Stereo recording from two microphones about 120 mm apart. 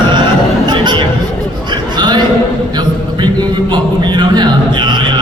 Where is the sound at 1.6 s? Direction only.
40° right (ahead or behind).